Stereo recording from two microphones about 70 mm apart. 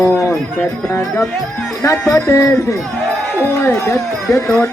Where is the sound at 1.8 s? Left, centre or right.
Left.